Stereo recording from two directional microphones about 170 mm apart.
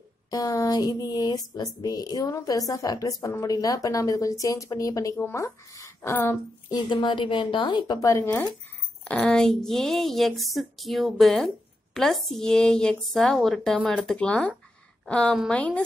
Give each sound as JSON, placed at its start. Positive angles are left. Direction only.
{"t": 0.3, "sound": "a woman's voice", "side_deg": 20}
{"t": 6.7, "sound": "a woman's voice", "side_deg": 25}
{"t": 9.0, "sound": "a woman's voice", "side_deg": 5}